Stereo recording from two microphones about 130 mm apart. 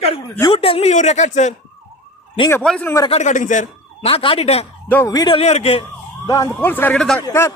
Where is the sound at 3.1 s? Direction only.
65° left (ahead or behind).